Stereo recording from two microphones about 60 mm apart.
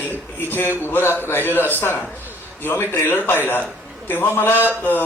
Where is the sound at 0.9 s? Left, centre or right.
Left.